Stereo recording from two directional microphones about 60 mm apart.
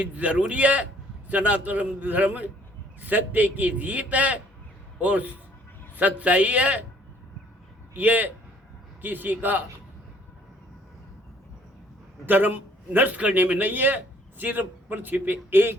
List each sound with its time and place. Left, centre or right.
0.0 s a man's voice: right
7.9 s a man's voice: right
12.2 s a man's voice: right